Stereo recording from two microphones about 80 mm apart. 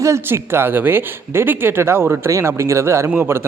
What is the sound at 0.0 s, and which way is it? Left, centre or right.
Speech, right.